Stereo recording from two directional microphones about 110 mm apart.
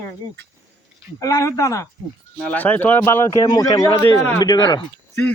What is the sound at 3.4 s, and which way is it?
Speech, 40° left (ahead or behind).